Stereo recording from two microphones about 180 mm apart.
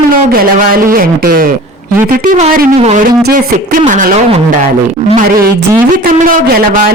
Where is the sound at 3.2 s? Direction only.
55° right (ahead or behind).